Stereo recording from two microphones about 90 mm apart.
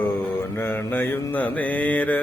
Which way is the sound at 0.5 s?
25° left (ahead or behind).